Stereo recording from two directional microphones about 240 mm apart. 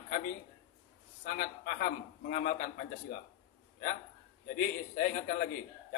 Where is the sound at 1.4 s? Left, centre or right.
Left.